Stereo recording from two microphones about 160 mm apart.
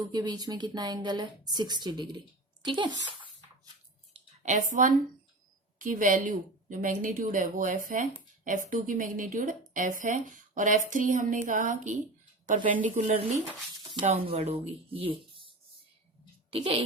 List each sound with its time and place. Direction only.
0.0 s speech: 25° right (ahead or behind)
4.1 s a sound: 50° right (ahead or behind)
5.8 s a woman's voice: 55° right (ahead or behind)
14.0 s a woman's voice: 40° right (ahead or behind)